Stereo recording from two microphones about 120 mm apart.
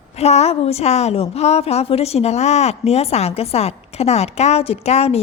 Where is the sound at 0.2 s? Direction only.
60° left (ahead or behind).